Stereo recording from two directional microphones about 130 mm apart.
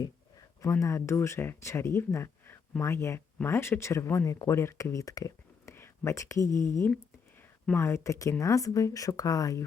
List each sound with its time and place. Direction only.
0.6 s speech: 25° left (ahead or behind)